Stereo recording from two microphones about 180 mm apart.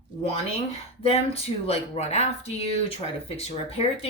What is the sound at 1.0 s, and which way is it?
Speech, 35° left (ahead or behind).